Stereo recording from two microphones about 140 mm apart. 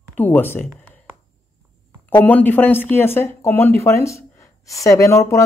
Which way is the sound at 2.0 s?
10° left (ahead or behind).